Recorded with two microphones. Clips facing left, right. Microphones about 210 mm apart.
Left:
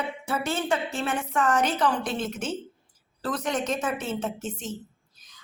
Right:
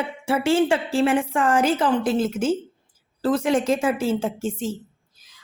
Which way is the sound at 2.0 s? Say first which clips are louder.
Right 8 dB; 10° right (ahead or behind).